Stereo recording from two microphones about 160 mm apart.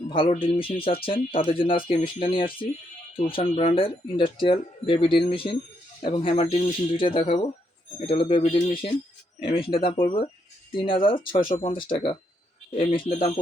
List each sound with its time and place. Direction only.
0.1 s speech: 35° left (ahead or behind)